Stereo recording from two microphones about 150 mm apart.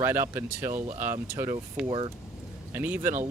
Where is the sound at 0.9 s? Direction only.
15° right (ahead or behind).